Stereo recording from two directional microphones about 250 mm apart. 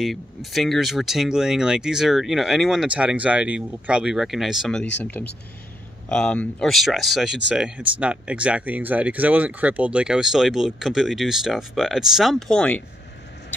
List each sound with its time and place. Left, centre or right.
0.0 s speech: centre